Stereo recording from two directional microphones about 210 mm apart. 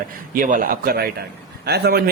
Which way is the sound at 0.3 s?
40° right (ahead or behind).